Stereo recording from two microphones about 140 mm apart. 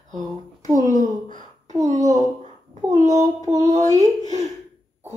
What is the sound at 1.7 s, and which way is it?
Speech, 25° right (ahead or behind).